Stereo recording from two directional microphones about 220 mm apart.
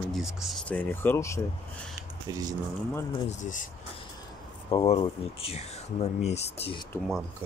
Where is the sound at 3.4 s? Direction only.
35° left (ahead or behind).